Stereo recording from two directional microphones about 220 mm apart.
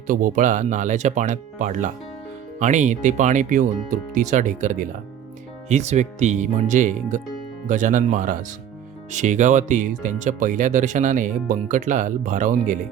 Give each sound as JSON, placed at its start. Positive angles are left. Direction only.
{"t": 0.1, "sound": "speech", "side_deg": -35}